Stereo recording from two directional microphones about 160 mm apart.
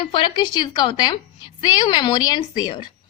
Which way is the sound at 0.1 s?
30° left (ahead or behind).